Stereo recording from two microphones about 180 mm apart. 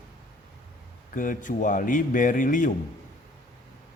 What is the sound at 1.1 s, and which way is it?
Speech, 50° left (ahead or behind).